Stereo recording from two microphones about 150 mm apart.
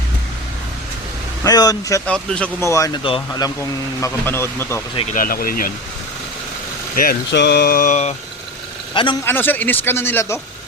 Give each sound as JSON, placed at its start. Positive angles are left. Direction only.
{"t": 1.5, "sound": "speech", "side_deg": 25}
{"t": 2.0, "sound": "speech", "side_deg": 5}
{"t": 2.6, "sound": "speech", "side_deg": 20}
{"t": 3.0, "sound": "speech", "side_deg": 35}
{"t": 3.6, "sound": "speech", "side_deg": 15}
{"t": 5.1, "sound": "speech", "side_deg": 75}
{"t": 6.9, "sound": "speech", "side_deg": 75}
{"t": 8.9, "sound": "a man's voice", "side_deg": 35}
{"t": 9.2, "sound": "speech", "side_deg": 15}